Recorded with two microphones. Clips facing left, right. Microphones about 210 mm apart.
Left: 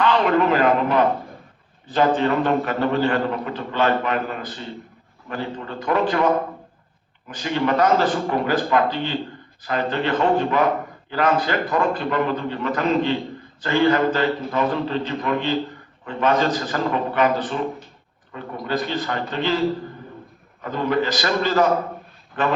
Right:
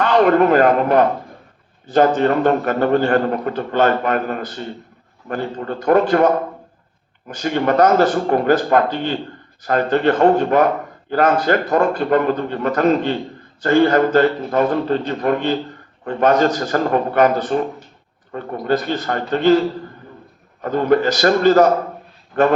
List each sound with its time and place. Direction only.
0.0 s a man's voice: 45° right (ahead or behind)